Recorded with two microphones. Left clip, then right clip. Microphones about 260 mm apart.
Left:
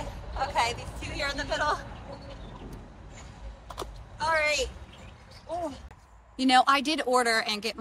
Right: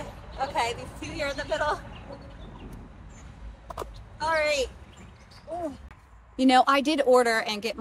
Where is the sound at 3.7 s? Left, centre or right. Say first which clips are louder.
Right 1 dB; centre.